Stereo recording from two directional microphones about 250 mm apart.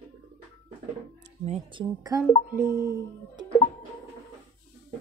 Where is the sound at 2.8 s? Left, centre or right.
Centre.